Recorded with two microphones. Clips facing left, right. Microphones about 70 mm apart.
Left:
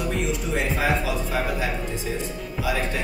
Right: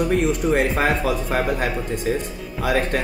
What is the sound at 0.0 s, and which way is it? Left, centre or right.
Speech, right.